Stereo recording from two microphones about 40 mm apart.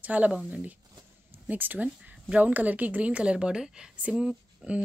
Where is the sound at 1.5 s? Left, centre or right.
Right; by 4.3 s centre.